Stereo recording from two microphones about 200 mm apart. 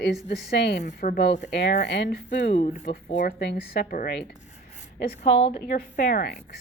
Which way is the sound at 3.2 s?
55° left (ahead or behind).